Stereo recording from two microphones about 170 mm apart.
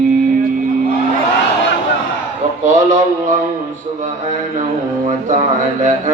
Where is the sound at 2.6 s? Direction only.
45° right (ahead or behind).